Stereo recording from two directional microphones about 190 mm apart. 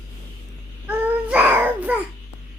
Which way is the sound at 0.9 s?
5° right (ahead or behind).